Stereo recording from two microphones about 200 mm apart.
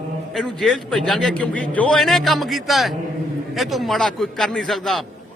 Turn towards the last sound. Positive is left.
turn(degrees=0)  # may be behind; listen again after turning